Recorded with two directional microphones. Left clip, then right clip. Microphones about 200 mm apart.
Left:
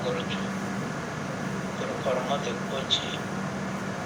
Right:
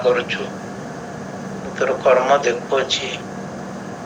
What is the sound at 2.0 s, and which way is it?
Speech, 45° right (ahead or behind).